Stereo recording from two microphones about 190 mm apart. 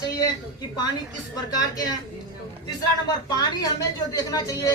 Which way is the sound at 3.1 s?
20° left (ahead or behind).